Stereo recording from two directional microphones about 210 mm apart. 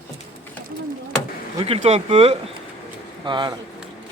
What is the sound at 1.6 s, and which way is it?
Speech, 30° right (ahead or behind).